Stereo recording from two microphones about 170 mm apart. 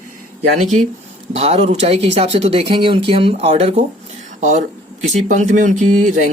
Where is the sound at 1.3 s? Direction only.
40° right (ahead or behind).